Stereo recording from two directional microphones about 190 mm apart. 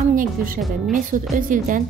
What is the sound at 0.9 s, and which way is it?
Speech, 45° right (ahead or behind).